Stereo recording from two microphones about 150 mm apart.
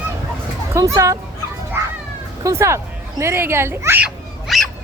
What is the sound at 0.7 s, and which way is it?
Speech, 20° right (ahead or behind).